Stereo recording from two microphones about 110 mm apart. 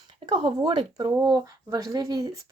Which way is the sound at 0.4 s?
40° right (ahead or behind).